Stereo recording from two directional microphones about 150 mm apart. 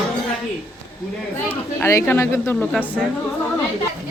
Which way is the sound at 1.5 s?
15° left (ahead or behind).